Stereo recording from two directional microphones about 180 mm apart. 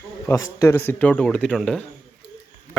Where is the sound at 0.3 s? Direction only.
15° left (ahead or behind).